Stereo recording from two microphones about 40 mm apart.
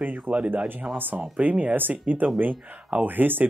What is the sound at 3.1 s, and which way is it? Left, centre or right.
Speech, right.